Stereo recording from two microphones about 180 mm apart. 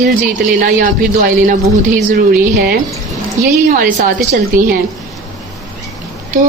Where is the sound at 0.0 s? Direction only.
50° right (ahead or behind).